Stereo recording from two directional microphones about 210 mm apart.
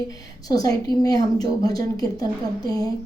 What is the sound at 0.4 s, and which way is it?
A woman's voice, 15° left (ahead or behind).